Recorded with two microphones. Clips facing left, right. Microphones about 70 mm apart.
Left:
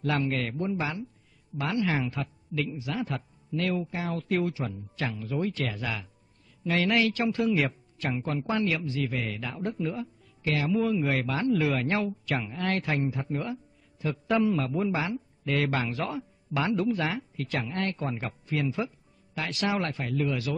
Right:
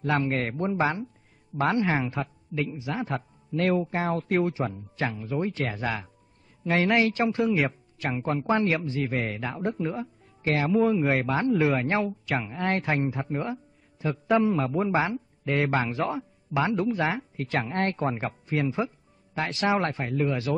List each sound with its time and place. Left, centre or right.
0.0 s speech: right
3.5 s speech: right
8.1 s a man's voice: right
14.5 s speech: right